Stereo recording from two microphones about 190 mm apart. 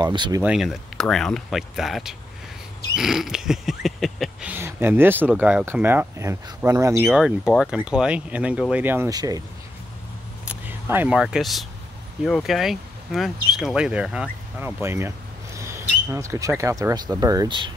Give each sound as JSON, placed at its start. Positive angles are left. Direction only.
{"t": 0.0, "sound": "speech", "side_deg": -20}
{"t": 0.4, "sound": "speech", "side_deg": -5}
{"t": 7.1, "sound": "speech", "side_deg": -5}
{"t": 10.4, "sound": "speech", "side_deg": -10}